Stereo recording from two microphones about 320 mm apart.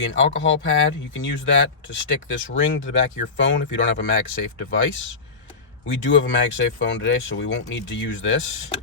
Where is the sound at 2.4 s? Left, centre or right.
Left.